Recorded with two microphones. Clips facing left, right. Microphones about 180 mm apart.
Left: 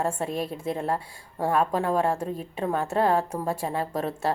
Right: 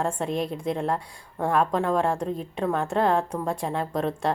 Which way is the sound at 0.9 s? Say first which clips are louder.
Even; 30° left (ahead or behind).